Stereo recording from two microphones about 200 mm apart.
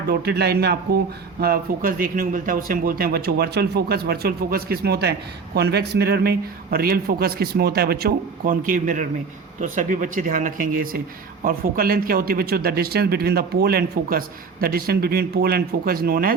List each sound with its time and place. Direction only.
0.1 s a man's voice: 50° right (ahead or behind)